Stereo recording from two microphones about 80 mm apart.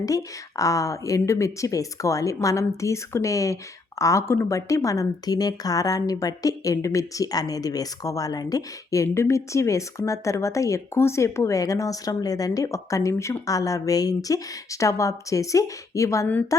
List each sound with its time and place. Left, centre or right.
0.0 s speech: left
9.1 s speech: left